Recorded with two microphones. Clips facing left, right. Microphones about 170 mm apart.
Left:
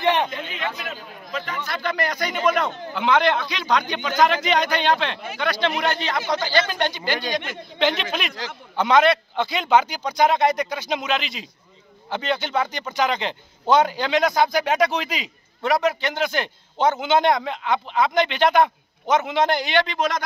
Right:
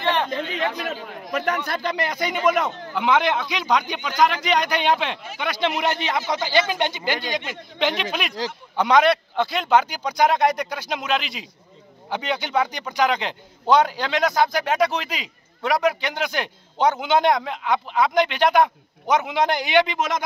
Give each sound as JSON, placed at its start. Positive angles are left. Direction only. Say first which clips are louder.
{"t": 0.0, "sound": "a sound", "louder": "left 2 dB", "side_deg": 15}
{"t": 1.3, "sound": "a man's voice", "louder": "right 6 dB", "side_deg": -65}
{"t": 1.6, "sound": "speech", "louder": "even", "side_deg": -30}
{"t": 2.4, "sound": "a man's voice", "louder": "right 1 dB", "side_deg": -5}
{"t": 9.9, "sound": "a man's voice", "louder": "even", "side_deg": -10}